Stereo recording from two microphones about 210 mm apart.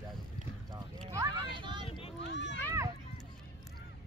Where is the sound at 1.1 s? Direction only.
25° right (ahead or behind).